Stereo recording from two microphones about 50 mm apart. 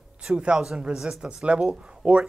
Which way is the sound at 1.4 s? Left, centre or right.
Right.